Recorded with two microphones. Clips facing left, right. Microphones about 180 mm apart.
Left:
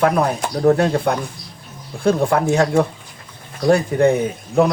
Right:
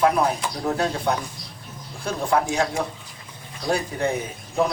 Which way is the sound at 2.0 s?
55° left (ahead or behind).